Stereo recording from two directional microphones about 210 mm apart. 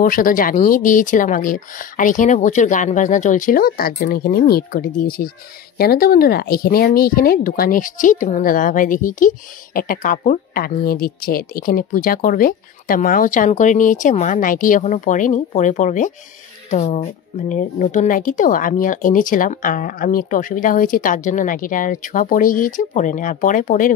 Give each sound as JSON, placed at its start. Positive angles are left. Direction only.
{"t": 0.0, "sound": "speech", "side_deg": 40}